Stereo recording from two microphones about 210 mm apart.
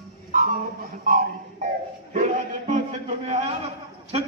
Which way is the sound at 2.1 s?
35° right (ahead or behind).